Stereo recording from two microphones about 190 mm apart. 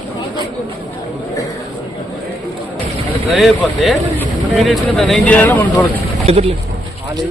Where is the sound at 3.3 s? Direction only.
Centre (ahead or behind).